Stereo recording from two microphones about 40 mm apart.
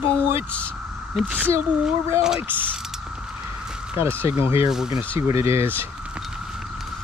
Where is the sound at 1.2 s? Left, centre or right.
Right.